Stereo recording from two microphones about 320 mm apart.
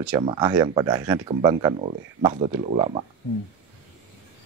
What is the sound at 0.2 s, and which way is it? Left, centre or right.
Speech, centre.